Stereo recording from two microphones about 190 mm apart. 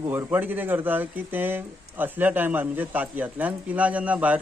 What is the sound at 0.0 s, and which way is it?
Speech, 10° right (ahead or behind).